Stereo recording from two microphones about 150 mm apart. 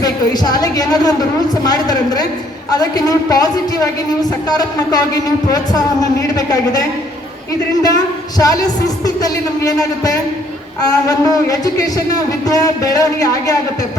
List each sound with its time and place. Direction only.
0.0 s a woman's voice: 25° left (ahead or behind)